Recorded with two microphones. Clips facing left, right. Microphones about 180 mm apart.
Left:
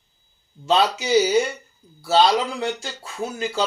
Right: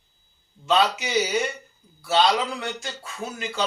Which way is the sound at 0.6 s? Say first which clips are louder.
Left 2 dB; 35° left (ahead or behind).